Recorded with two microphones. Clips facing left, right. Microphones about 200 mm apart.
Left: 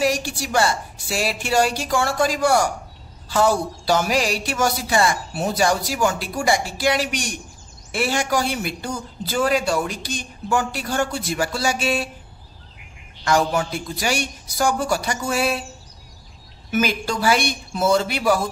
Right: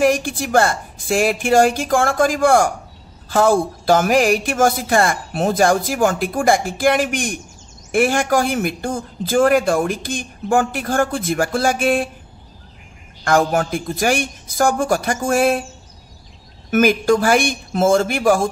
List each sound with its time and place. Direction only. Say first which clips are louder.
0.0 s a man's voice: right 5 dB; 50° right (ahead or behind)
13.2 s a man's voice: right 3 dB; 50° right (ahead or behind)
16.7 s a man's voice: right 8 dB; 50° right (ahead or behind)